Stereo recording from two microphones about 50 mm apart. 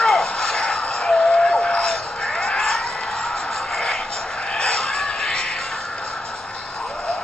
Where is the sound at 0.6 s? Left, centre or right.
Centre.